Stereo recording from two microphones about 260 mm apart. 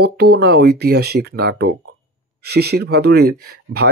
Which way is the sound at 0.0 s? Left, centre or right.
Right.